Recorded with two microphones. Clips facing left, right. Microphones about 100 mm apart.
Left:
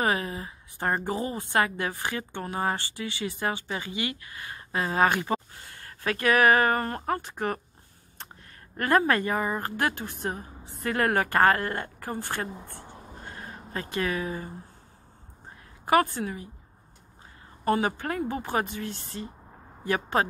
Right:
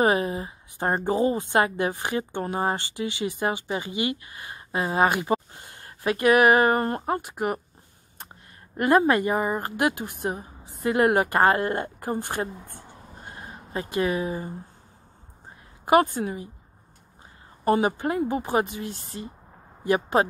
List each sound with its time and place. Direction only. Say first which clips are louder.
0.0 s a woman's voice: right 5 dB; 25° right (ahead or behind)
7.0 s speech: right 2 dB; 15° right (ahead or behind)
8.7 s a woman's voice: right 4 dB; 20° right (ahead or behind)
13.2 s a sound: right 1 dB; 20° right (ahead or behind)
15.8 s a woman's voice: right 3 dB; 20° right (ahead or behind)
17.6 s speech: right 4 dB; 20° right (ahead or behind)